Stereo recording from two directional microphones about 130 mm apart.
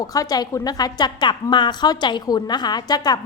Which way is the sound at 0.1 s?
30° left (ahead or behind).